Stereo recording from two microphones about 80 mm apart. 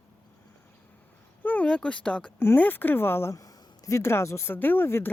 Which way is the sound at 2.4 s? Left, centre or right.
Left.